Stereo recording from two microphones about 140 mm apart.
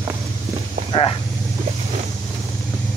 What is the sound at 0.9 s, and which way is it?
Vehicle, 40° left (ahead or behind).